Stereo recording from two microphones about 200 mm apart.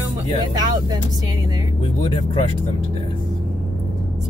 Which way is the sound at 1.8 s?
25° left (ahead or behind).